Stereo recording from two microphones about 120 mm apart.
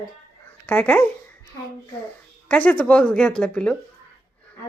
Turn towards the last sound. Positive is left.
turn(degrees=10)  # may be behind; listen again after turning